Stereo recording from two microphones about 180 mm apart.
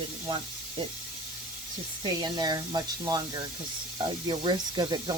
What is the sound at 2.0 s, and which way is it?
Speech, 25° right (ahead or behind).